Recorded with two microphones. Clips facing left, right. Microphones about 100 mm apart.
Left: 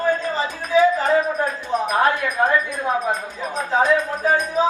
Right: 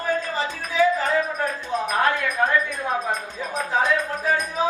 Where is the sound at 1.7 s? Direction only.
20° left (ahead or behind).